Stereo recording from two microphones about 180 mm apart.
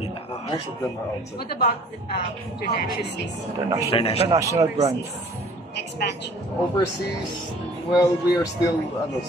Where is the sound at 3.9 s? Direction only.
35° left (ahead or behind).